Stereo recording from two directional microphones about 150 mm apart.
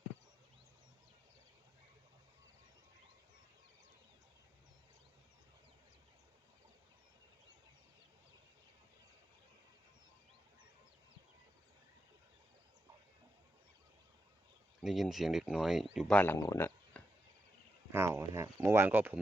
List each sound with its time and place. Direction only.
14.8 s speech: centre (ahead or behind)
16.1 s speech: 15° left (ahead or behind)
17.9 s speech: 15° right (ahead or behind)